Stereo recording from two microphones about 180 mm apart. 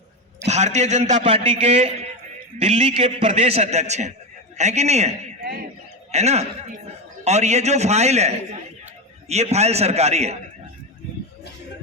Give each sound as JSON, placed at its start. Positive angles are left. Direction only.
{"t": 0.4, "sound": "a man's voice", "side_deg": -40}